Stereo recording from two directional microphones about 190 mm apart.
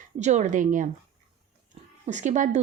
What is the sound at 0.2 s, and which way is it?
Speech, 35° right (ahead or behind).